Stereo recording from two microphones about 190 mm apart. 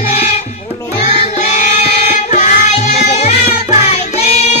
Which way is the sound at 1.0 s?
35° left (ahead or behind).